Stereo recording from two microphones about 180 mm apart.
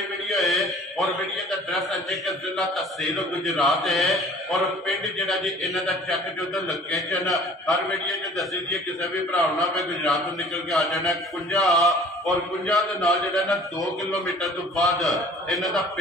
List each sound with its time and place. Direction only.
0.3 s a man's voice: centre (ahead or behind)
3.2 s mantra: centre (ahead or behind)